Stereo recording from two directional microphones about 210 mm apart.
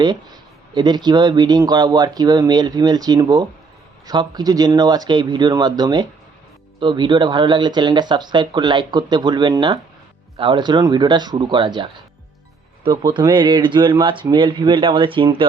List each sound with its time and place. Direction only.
0.7 s speech: 20° right (ahead or behind)